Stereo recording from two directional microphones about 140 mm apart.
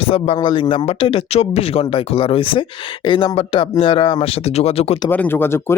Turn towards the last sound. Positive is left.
turn(degrees=15)  # may be behind; listen again after turning